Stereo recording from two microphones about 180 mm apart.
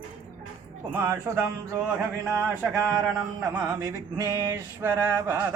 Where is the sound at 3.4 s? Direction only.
15° right (ahead or behind).